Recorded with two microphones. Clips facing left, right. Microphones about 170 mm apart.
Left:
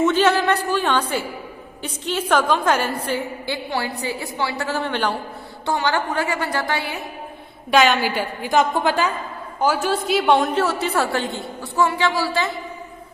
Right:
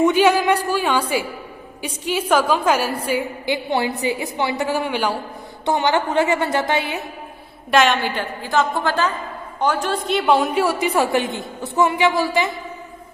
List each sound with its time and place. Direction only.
0.0 s a woman's voice: 10° right (ahead or behind)
7.7 s a woman's voice: centre (ahead or behind); by 12.5 s 20° right (ahead or behind)